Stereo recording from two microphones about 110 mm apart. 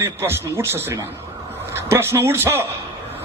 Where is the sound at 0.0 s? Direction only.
20° right (ahead or behind).